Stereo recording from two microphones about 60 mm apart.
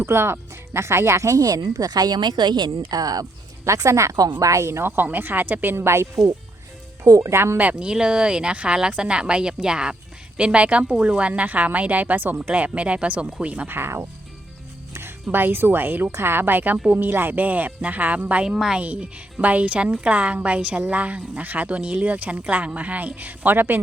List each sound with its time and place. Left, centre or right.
0.0 s speech: right
3.6 s speech: right
4.1 s a woman's voice: right
5.7 s speech: right
7.0 s speech: right
7.6 s a woman's voice: centre
13.7 s a woman's voice: right
14.9 s a woman's voice: right
18.4 s speech: centre
18.8 s a woman's voice: right